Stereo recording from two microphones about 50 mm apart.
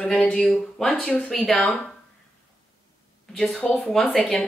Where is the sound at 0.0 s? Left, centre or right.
Centre.